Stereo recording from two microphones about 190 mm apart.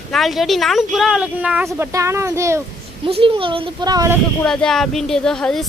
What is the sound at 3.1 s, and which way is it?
A child's voice, 30° right (ahead or behind).